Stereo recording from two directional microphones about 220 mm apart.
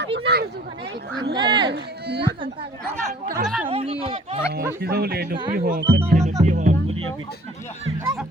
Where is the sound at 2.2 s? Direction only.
25° right (ahead or behind).